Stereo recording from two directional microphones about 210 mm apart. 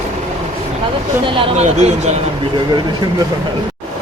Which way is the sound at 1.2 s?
30° right (ahead or behind).